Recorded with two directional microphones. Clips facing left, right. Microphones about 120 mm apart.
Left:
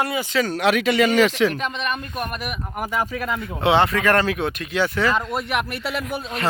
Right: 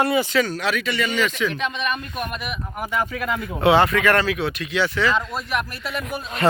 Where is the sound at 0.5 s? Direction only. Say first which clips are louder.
Left 6 dB; 65° left (ahead or behind); by 1.0 s 90° left.